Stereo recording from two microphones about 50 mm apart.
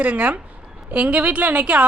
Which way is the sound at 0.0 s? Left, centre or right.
Right.